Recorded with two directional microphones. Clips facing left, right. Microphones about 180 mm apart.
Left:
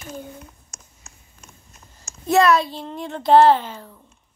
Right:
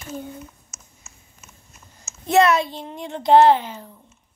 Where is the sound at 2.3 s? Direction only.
20° right (ahead or behind).